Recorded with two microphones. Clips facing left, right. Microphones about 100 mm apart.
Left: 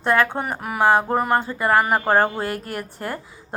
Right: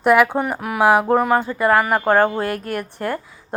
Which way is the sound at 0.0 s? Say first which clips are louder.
Right 5 dB; 5° right (ahead or behind).